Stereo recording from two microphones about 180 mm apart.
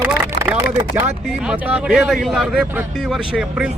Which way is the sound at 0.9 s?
10° right (ahead or behind).